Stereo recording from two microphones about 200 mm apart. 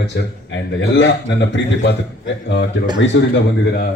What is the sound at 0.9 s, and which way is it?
Speech, 60° left (ahead or behind).